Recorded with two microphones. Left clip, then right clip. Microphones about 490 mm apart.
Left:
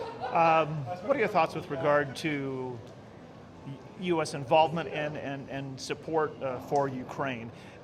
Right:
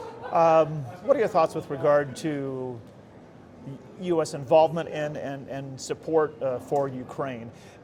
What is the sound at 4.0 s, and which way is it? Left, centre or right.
A man's voice, centre.